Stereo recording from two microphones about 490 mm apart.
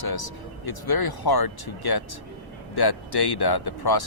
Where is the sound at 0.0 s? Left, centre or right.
Left.